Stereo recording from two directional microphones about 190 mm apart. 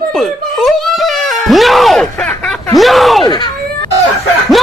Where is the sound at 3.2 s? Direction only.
20° left (ahead or behind).